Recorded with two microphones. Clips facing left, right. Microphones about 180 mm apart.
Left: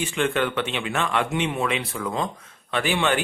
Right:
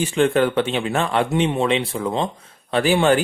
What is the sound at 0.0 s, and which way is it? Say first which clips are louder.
Speech: right 6 dB; 35° right (ahead or behind).